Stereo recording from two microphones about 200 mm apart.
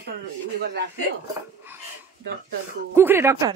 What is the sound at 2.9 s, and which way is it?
Speech, 10° right (ahead or behind).